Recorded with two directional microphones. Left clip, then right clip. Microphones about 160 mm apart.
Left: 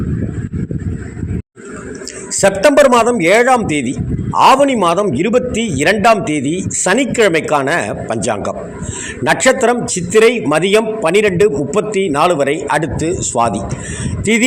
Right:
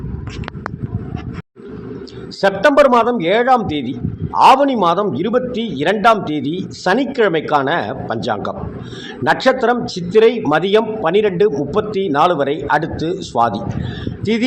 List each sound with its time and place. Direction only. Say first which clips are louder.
2.4 s a man's voice: left 2 dB; 35° left (ahead or behind); by 13.5 s 15° left (ahead or behind)